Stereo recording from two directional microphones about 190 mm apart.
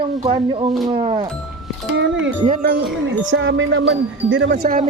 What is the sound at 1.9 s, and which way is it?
Music, 75° right (ahead or behind).